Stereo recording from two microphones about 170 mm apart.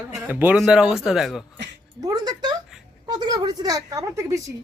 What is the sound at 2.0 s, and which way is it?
A woman's voice, 25° right (ahead or behind).